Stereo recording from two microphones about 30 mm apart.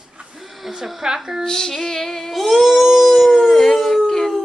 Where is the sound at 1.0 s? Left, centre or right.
Centre.